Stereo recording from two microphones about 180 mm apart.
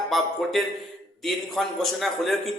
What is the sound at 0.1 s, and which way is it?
A man's voice, centre (ahead or behind).